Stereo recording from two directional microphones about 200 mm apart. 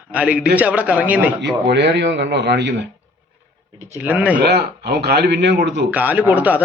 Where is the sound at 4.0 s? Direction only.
5° right (ahead or behind).